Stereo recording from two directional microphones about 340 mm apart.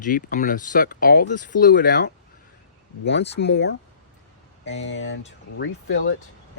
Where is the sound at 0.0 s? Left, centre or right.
Left.